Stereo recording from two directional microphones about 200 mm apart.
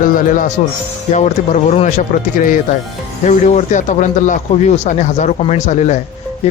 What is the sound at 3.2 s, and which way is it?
Speech, 35° left (ahead or behind).